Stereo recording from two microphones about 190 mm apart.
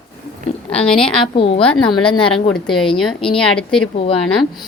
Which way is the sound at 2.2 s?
30° left (ahead or behind).